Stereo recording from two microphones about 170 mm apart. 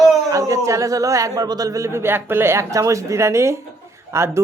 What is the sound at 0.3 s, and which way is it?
Speech, 20° right (ahead or behind).